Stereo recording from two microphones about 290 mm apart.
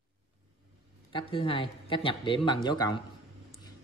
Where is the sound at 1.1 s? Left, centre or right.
Centre.